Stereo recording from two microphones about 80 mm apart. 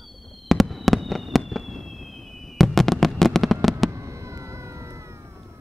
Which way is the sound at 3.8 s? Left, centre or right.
Right.